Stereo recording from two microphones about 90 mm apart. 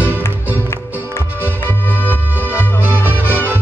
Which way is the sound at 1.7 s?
20° left (ahead or behind).